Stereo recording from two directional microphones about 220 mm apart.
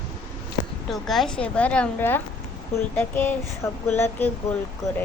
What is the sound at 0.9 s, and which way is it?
Child singing, centre (ahead or behind).